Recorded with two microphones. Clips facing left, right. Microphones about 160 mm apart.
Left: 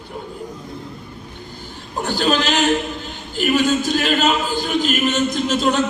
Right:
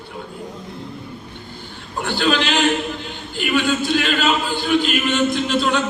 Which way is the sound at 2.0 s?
40° left (ahead or behind).